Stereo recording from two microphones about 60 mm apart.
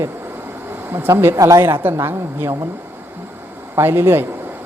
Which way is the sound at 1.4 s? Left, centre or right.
Right.